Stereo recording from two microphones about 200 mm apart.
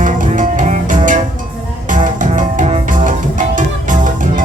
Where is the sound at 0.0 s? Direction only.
40° right (ahead or behind).